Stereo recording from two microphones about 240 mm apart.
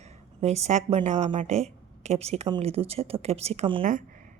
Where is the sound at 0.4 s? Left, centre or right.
Right.